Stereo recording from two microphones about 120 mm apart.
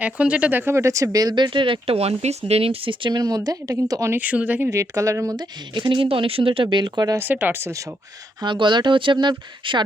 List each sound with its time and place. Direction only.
0.0 s speech: 10° right (ahead or behind); by 4.1 s 30° right (ahead or behind)
4.1 s speech: 10° right (ahead or behind)
4.7 s speech: 25° right (ahead or behind)
5.4 s speech: 40° right (ahead or behind)
7.2 s speech: 15° right (ahead or behind)
8.4 s speech: 40° right (ahead or behind)